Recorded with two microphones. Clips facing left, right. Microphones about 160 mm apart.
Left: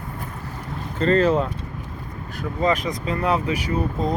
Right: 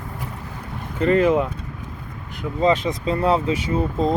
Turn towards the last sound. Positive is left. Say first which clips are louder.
# right 3 dB
turn(degrees=-25)  # may be behind; listen again after turning